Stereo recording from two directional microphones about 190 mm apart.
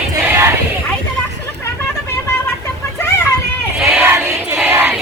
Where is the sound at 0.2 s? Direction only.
10° right (ahead or behind).